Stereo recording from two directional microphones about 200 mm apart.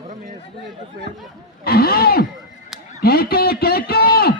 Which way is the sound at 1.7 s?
50° left (ahead or behind).